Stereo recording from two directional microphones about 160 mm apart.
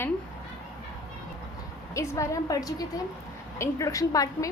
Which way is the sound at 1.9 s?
20° left (ahead or behind).